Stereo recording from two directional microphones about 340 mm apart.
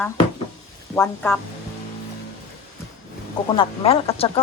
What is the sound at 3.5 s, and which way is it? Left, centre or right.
Speech, centre.